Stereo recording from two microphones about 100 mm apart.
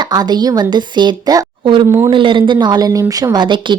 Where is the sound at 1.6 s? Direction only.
55° right (ahead or behind).